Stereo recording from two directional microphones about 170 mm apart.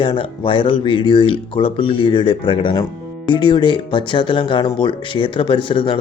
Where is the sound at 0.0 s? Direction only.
30° left (ahead or behind).